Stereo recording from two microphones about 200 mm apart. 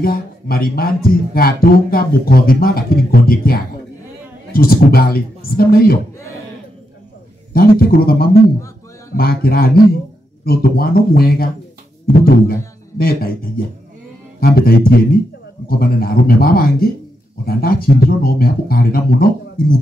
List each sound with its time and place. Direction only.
0.0 s speech: 50° left (ahead or behind)
7.5 s speech: 50° left (ahead or behind)